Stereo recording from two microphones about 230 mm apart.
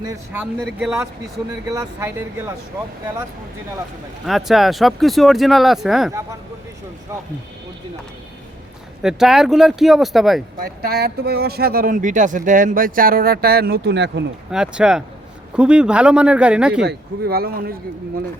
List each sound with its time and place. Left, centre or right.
0.0 s speech: centre
0.6 s speech: centre
1.7 s speech: centre
4.3 s speech: centre
9.0 s speech: centre
10.6 s speech: right
14.5 s speech: centre
16.8 s speech: right